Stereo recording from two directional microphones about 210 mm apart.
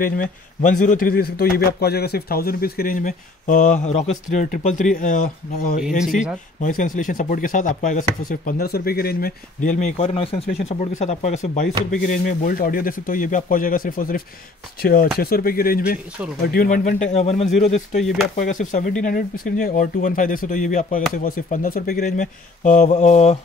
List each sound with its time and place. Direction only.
0.0 s a man's voice: 40° left (ahead or behind)